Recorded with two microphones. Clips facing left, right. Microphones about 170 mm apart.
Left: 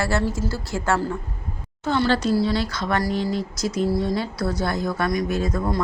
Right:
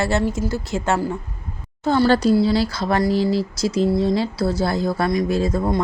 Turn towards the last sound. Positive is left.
turn(degrees=-25)  # may be behind; listen again after turning